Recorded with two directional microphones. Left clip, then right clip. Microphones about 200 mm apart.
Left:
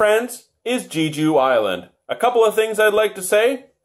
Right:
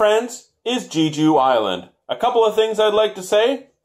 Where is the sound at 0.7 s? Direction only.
15° left (ahead or behind).